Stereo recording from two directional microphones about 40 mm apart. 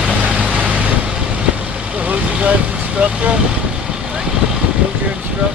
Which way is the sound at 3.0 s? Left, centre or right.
Right.